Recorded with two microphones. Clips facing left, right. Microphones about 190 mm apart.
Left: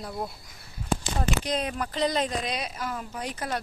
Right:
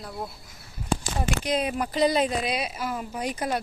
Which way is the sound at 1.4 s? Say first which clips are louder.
Right 3 dB; 10° right (ahead or behind).